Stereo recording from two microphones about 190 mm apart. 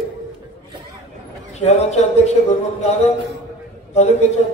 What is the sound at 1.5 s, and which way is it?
A man's voice, 35° left (ahead or behind).